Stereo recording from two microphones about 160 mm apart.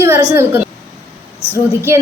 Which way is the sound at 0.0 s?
15° right (ahead or behind).